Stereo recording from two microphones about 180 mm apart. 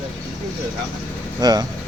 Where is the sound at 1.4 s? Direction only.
20° right (ahead or behind).